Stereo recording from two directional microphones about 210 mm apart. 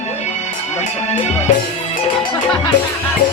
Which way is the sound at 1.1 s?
30° left (ahead or behind).